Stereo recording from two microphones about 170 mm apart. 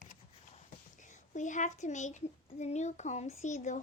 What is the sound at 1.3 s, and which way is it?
A child's voice, 45° left (ahead or behind).